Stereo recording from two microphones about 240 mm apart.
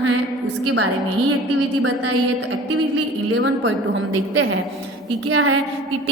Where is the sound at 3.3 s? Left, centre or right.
Right.